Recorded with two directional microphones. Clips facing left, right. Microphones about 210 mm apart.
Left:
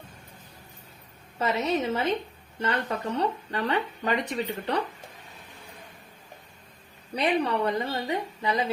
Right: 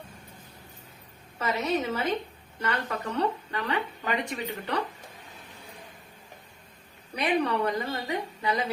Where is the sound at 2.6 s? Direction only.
30° left (ahead or behind).